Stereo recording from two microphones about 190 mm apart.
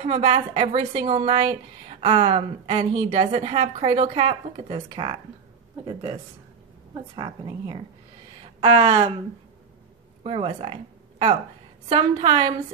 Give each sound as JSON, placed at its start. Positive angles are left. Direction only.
{"t": 0.0, "sound": "a woman's voice", "side_deg": -30}
{"t": 10.2, "sound": "a woman's voice", "side_deg": -30}